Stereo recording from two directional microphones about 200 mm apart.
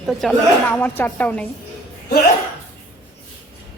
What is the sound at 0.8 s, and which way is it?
Speech, 10° left (ahead or behind).